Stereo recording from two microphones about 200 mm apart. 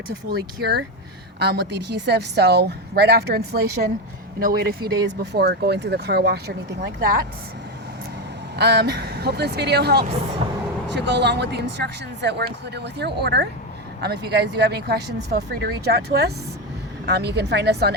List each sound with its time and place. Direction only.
0.3 s a woman's voice: 55° right (ahead or behind)
8.5 s a woman's voice: 55° right (ahead or behind)